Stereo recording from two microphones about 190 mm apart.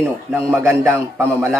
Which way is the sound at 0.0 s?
10° right (ahead or behind).